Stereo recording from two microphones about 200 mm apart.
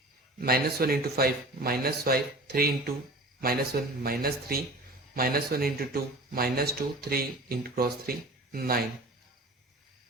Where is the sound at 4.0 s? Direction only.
50° right (ahead or behind).